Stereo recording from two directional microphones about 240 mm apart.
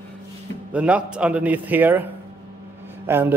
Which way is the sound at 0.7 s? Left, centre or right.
Centre.